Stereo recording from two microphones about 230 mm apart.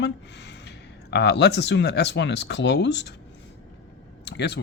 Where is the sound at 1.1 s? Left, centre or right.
Left.